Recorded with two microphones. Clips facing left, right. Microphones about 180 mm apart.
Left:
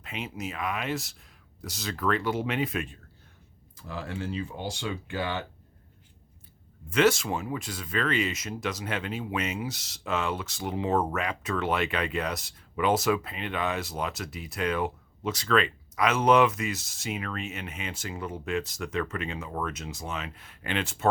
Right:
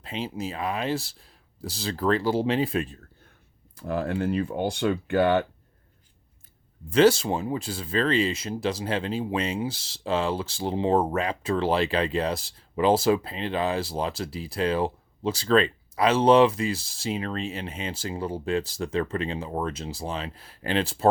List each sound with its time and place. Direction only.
0.0 s speech: 30° right (ahead or behind)
3.8 s speech: 55° right (ahead or behind)
6.9 s speech: 30° right (ahead or behind)